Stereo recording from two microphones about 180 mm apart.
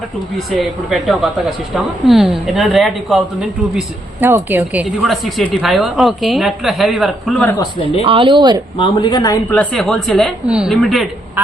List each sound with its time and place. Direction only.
0.3 s a woman's voice: centre (ahead or behind)
3.8 s a woman's voice: 10° right (ahead or behind)
8.0 s speech: 30° right (ahead or behind)
8.8 s speech: 25° left (ahead or behind)
9.5 s a woman's voice: 5° left (ahead or behind)